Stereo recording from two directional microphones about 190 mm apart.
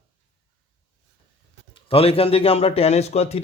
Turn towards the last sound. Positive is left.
turn(degrees=35)  # may be behind; listen again after turning